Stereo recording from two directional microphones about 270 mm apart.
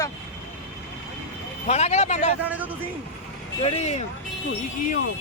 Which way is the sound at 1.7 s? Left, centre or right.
Left.